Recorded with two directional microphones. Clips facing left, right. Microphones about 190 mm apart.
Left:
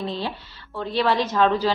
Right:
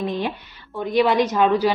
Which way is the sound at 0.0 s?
15° right (ahead or behind).